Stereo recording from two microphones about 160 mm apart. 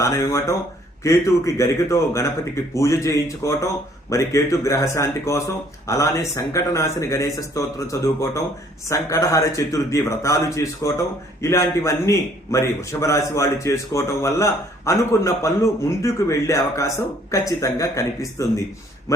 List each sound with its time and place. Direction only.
0.0 s a man's voice: 20° left (ahead or behind)